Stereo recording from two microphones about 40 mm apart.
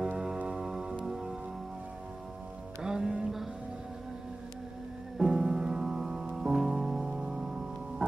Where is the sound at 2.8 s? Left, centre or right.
Centre.